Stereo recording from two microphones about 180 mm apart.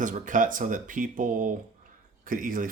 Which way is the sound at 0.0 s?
45° right (ahead or behind).